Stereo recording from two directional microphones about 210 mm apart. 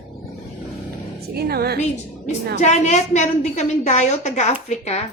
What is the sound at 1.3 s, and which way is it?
Speech, 50° right (ahead or behind).